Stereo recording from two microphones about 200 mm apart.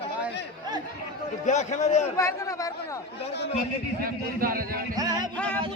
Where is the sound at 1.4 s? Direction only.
35° left (ahead or behind).